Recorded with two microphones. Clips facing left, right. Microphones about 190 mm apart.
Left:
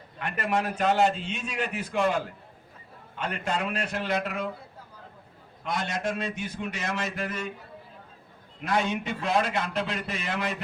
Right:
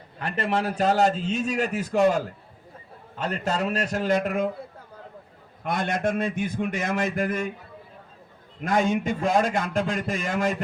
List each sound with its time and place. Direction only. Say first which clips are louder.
0.2 s a man's voice: right 2 dB; 30° right (ahead or behind); by 4.4 s 50° right (ahead or behind)
5.6 s a man's voice: right 4 dB; 55° right (ahead or behind)
8.6 s a man's voice: right 5 dB; 45° right (ahead or behind)